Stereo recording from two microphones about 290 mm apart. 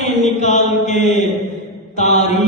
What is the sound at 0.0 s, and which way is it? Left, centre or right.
Chant, left.